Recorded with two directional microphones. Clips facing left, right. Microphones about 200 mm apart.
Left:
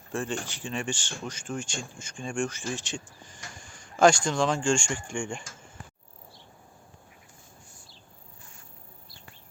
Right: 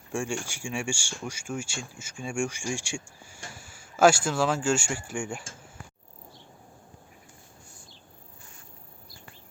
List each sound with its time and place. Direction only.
0.1 s speech: 15° right (ahead or behind)